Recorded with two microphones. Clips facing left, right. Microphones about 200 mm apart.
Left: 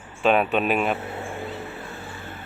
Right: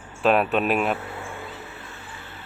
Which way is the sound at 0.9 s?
30° left (ahead or behind).